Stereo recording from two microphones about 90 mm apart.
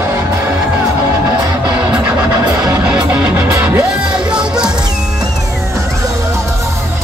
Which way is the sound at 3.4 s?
25° right (ahead or behind).